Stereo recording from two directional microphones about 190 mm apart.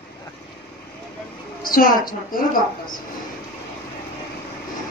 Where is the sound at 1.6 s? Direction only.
50° left (ahead or behind).